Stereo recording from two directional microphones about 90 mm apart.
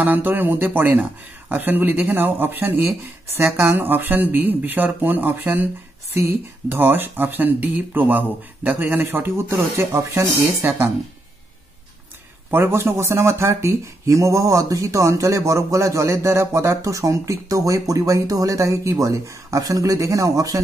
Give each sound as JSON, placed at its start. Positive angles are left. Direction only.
{"t": 0.0, "sound": "speech", "side_deg": -20}
{"t": 12.4, "sound": "speech", "side_deg": -25}